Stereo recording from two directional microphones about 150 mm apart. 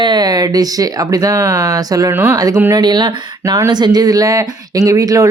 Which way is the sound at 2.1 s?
15° right (ahead or behind).